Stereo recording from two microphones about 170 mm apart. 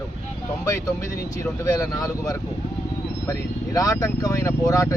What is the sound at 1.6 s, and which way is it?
Speech, 20° left (ahead or behind).